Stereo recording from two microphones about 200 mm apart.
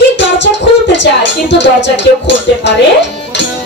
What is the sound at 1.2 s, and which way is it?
Music, 65° left (ahead or behind).